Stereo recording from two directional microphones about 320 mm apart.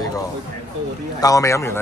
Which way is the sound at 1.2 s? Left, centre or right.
Centre.